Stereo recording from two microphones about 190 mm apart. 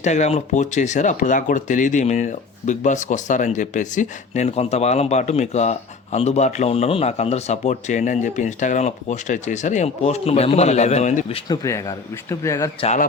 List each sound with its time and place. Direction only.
0.0 s speech: 35° left (ahead or behind)
11.4 s speech: 20° left (ahead or behind)
12.8 s speech: 35° left (ahead or behind)